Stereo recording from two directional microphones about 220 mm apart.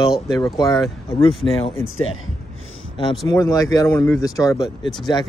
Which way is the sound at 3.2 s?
15° left (ahead or behind).